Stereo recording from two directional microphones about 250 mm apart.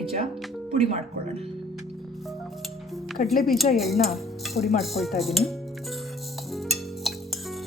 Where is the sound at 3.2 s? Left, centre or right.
Left.